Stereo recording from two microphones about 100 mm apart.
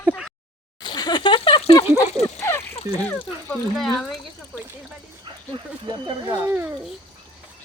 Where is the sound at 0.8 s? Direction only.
45° left (ahead or behind); by 1.7 s 65° left (ahead or behind).